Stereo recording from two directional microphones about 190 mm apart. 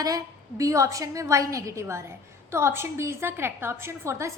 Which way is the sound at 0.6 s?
15° right (ahead or behind).